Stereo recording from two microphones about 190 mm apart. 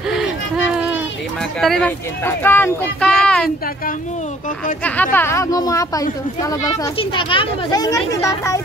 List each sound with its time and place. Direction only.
1.6 s speech: 5° left (ahead or behind)
4.8 s speech: 10° left (ahead or behind)
6.7 s speech: 30° left (ahead or behind)